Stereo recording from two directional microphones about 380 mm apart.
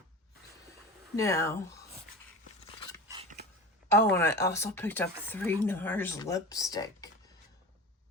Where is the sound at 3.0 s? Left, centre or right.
Centre.